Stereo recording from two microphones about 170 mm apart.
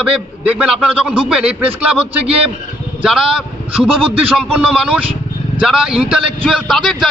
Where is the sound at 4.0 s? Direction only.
10° right (ahead or behind).